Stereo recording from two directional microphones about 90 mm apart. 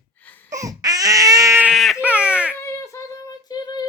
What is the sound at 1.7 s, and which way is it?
Baby cry, centre (ahead or behind).